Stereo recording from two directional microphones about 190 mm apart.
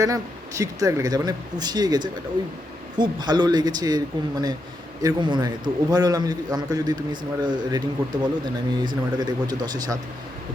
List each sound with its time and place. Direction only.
0.0 s a man's voice: 15° right (ahead or behind)